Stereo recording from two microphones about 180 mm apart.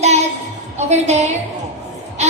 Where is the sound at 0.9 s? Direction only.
40° right (ahead or behind).